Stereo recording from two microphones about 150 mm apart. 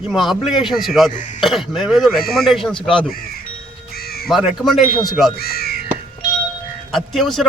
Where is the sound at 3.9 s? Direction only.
90° left.